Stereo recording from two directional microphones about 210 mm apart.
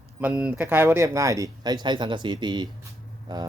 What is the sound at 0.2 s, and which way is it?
Speech, 5° right (ahead or behind).